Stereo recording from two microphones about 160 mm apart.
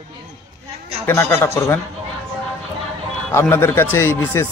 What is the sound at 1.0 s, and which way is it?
Speech, 15° left (ahead or behind).